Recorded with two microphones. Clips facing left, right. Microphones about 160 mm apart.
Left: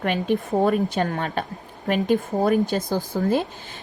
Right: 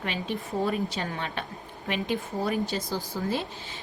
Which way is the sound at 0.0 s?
55° left (ahead or behind).